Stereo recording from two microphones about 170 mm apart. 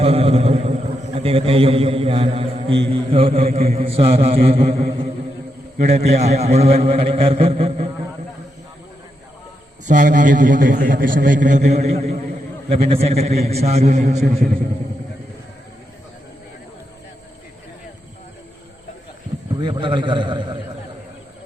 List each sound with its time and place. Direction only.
0.0 s a sound: 35° right (ahead or behind)
1.1 s a man's voice: 35° right (ahead or behind)
9.8 s a man's voice: 45° right (ahead or behind)
19.5 s a man's voice: 25° right (ahead or behind)